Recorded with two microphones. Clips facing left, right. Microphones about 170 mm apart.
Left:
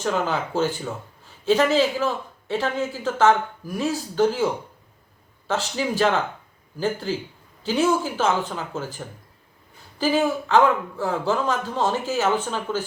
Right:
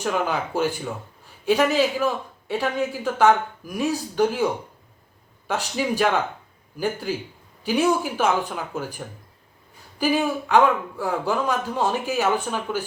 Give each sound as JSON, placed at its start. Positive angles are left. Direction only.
{"t": 0.0, "sound": "speech", "side_deg": -10}
{"t": 5.5, "sound": "speech", "side_deg": -15}
{"t": 10.0, "sound": "speech", "side_deg": -15}